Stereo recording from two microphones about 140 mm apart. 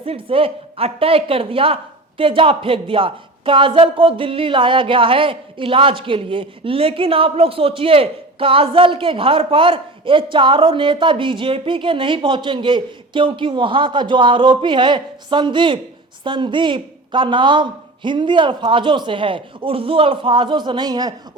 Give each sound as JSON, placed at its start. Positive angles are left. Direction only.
{"t": 0.0, "sound": "speech", "side_deg": -40}